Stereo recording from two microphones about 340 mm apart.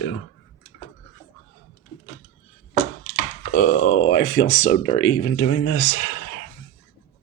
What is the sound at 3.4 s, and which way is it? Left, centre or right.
Speech, left.